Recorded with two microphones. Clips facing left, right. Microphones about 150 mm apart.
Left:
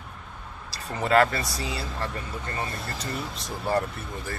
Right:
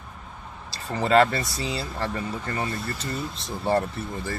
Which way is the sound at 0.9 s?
30° right (ahead or behind).